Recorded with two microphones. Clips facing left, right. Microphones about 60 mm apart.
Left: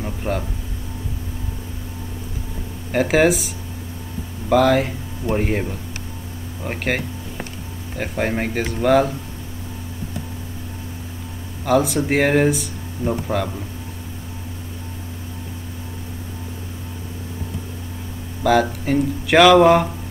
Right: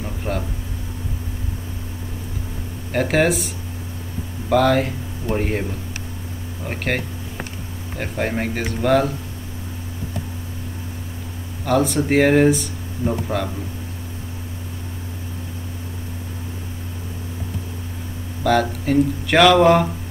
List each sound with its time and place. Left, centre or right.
0.0 s a sound: centre
2.9 s speech: centre
11.6 s speech: centre
18.4 s speech: centre